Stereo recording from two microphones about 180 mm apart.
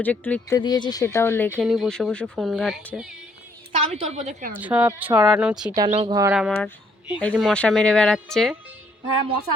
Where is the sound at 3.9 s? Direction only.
40° right (ahead or behind).